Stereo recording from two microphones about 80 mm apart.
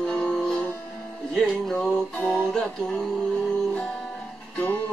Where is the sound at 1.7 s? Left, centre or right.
Centre.